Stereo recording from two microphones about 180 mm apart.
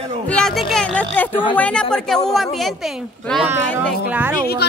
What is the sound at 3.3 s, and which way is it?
Speech, 10° right (ahead or behind).